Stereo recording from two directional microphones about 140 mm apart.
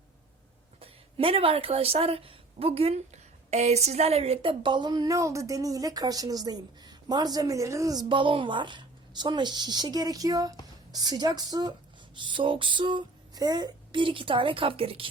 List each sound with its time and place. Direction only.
0.8 s a woman's voice: 45° right (ahead or behind); by 8.0 s 25° right (ahead or behind)
8.1 s a woman's voice: 35° right (ahead or behind)